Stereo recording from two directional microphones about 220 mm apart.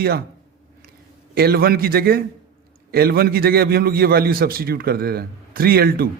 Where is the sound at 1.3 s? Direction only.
45° right (ahead or behind).